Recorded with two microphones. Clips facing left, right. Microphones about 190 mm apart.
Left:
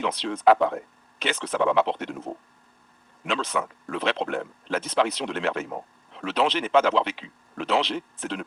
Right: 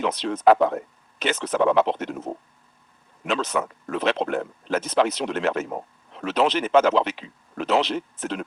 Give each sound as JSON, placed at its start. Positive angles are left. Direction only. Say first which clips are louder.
{"t": 0.0, "sound": "speech", "louder": "right 2 dB", "side_deg": -45}